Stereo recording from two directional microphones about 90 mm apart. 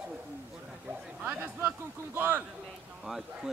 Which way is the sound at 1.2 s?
20° right (ahead or behind).